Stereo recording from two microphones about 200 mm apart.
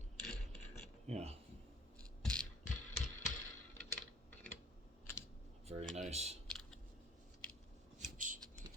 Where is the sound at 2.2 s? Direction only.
5° left (ahead or behind).